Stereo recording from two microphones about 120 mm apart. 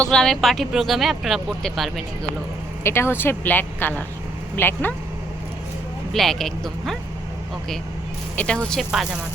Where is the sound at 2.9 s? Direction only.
20° left (ahead or behind).